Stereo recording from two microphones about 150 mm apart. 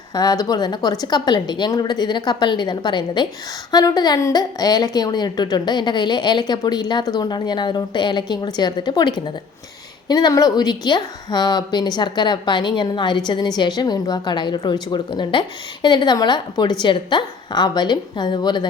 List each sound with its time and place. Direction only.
0.1 s a woman's voice: 25° left (ahead or behind)